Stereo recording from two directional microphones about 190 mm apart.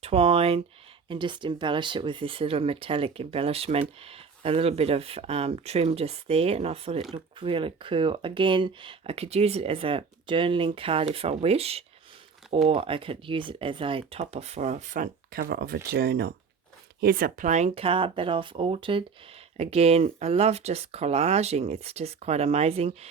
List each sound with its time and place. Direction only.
0.0 s speech: 30° right (ahead or behind)